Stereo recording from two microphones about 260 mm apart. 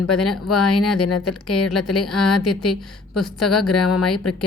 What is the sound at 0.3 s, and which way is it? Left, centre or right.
A woman's voice, left.